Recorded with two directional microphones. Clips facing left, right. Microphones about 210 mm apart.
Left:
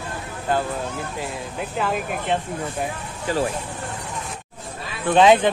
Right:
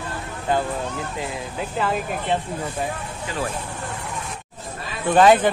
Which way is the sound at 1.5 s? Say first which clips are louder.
Right 1 dB; centre (ahead or behind).